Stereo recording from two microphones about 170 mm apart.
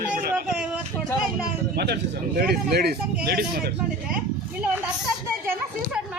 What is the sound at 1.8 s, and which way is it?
Speech, 75° right (ahead or behind).